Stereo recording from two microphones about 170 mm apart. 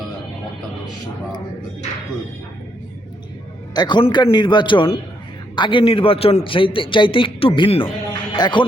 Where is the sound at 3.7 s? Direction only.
25° left (ahead or behind).